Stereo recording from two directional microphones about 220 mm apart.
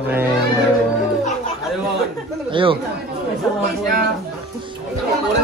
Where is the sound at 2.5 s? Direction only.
25° right (ahead or behind).